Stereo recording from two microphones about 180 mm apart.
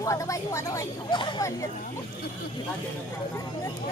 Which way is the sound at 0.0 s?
15° left (ahead or behind).